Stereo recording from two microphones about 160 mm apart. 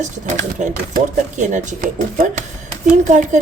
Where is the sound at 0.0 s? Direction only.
55° right (ahead or behind).